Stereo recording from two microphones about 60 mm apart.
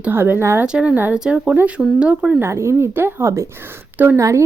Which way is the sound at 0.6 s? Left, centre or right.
Centre.